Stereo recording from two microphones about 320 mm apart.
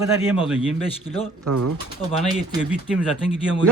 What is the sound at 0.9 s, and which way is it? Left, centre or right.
Speech, centre.